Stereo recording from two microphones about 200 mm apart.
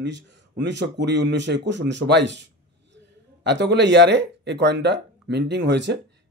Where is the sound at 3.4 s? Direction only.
60° right (ahead or behind).